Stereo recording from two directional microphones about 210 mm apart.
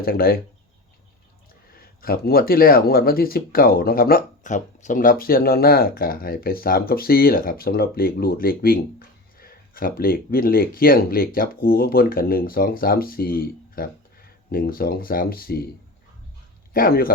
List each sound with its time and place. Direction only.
0.0 s speech: 45° left (ahead or behind)
1.7 s speech: 45° left (ahead or behind)
16.7 s speech: 45° left (ahead or behind)